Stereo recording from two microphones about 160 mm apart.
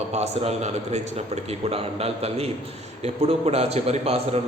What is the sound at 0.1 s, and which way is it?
A man's voice, 45° right (ahead or behind).